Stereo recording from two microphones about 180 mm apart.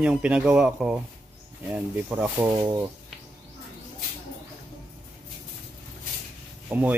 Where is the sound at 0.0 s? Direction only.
5° right (ahead or behind).